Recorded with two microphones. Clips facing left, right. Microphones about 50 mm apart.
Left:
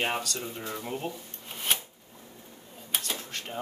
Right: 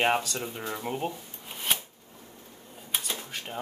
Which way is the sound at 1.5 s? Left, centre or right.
Centre.